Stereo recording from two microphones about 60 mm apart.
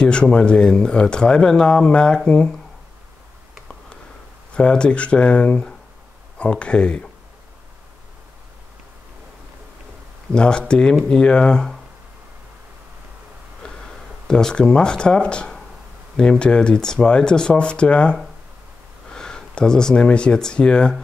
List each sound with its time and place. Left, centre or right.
0.0 s speech: centre
4.6 s speech: centre
10.3 s speech: centre
13.6 s a sound: centre
16.2 s speech: centre